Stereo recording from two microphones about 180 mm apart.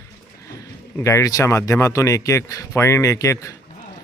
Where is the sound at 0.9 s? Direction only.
15° left (ahead or behind).